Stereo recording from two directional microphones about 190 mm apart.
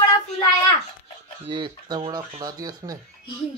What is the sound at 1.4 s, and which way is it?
Speech, 25° right (ahead or behind).